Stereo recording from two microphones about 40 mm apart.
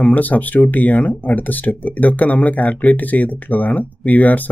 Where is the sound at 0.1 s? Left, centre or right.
Left.